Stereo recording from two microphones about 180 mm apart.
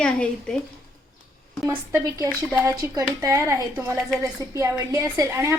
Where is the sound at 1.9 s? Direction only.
20° right (ahead or behind).